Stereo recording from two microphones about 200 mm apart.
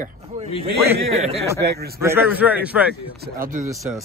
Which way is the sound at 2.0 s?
10° right (ahead or behind).